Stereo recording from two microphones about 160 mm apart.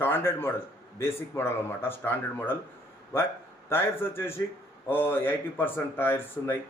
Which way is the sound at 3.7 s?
15° left (ahead or behind).